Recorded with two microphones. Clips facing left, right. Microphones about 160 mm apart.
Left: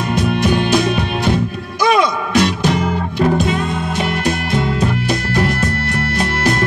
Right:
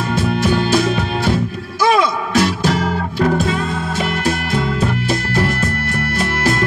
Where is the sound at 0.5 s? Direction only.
15° left (ahead or behind).